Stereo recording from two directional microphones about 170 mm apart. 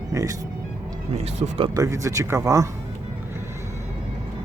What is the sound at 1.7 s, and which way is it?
Speech, 20° right (ahead or behind).